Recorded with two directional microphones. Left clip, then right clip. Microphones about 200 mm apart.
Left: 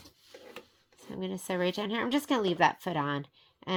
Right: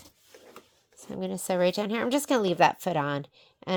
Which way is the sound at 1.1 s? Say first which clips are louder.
Right 5 dB; 55° right (ahead or behind).